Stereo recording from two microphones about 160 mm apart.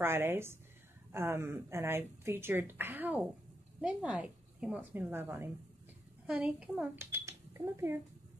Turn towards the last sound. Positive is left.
turn(degrees=-15)  # may be behind; listen again after turning